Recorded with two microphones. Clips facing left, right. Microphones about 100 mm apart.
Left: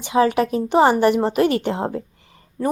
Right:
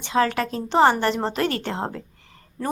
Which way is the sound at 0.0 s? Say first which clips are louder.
Left 4 dB; 15° left (ahead or behind).